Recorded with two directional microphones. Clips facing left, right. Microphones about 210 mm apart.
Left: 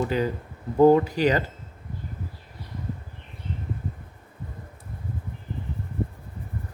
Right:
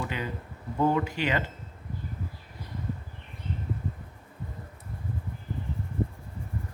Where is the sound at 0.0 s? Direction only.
40° left (ahead or behind).